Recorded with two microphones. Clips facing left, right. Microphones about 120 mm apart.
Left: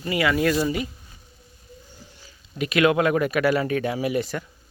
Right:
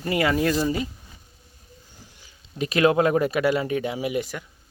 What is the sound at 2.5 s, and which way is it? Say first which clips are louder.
Speech: even; 35° right (ahead or behind).